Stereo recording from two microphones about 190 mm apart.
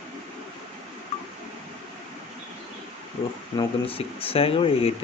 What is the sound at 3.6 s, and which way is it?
Speech, 30° left (ahead or behind).